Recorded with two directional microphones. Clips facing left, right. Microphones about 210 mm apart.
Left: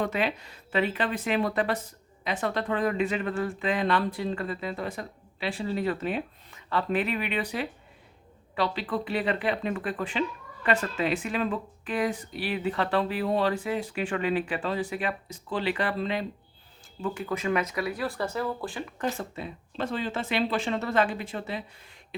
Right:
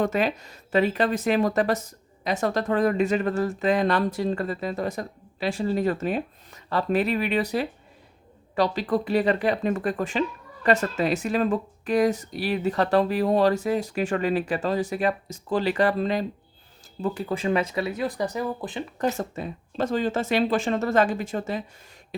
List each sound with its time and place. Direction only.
0.0 s speech: 45° right (ahead or behind); by 18.9 s 20° right (ahead or behind)
18.9 s speech: 40° right (ahead or behind)